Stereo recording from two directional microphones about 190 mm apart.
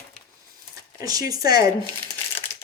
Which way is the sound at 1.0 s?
20° right (ahead or behind).